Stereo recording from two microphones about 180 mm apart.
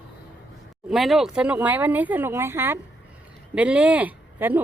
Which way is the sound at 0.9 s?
Centre (ahead or behind).